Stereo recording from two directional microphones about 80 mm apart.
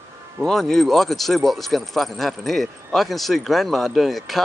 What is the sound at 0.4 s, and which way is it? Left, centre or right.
Speech, centre.